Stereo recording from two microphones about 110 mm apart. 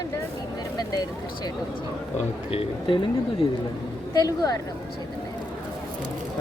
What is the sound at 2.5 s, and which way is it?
Speech, 55° left (ahead or behind).